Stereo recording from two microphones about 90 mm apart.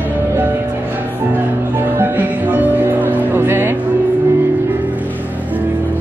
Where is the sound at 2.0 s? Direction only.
20° right (ahead or behind).